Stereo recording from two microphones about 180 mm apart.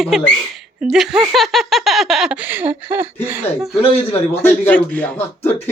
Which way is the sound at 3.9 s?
35° left (ahead or behind).